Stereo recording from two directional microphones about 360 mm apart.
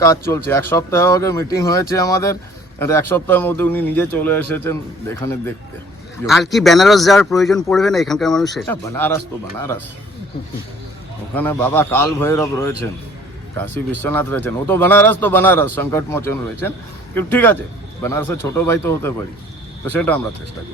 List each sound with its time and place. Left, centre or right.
0.0 s speech: centre
6.2 s speech: centre
11.3 s speech: centre
14.0 s speech: centre